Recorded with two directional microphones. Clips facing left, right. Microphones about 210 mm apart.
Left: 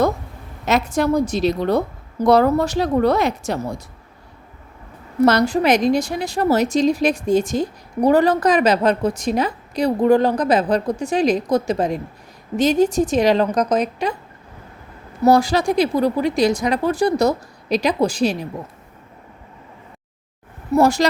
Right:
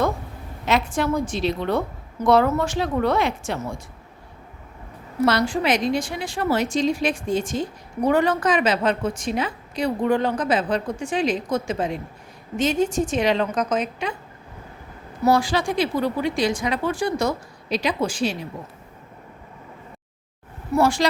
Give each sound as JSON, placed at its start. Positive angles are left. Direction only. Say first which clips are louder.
{"t": 0.6, "sound": "a woman's voice", "louder": "left 3 dB", "side_deg": 40}
{"t": 5.2, "sound": "a woman's voice", "louder": "left 5 dB", "side_deg": 45}
{"t": 15.2, "sound": "a woman's voice", "louder": "left 5 dB", "side_deg": 40}
{"t": 20.7, "sound": "a woman's voice", "louder": "left 4 dB", "side_deg": 40}